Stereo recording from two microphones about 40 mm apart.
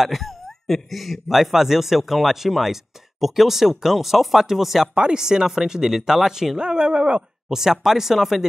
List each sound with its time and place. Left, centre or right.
0.0 s a sound: centre
0.9 s speech: centre
4.9 s speech: right
7.4 s speech: centre